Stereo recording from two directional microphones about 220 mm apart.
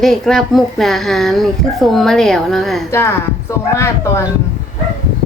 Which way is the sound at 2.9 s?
10° left (ahead or behind).